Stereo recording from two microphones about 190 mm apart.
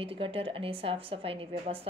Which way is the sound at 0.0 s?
30° right (ahead or behind).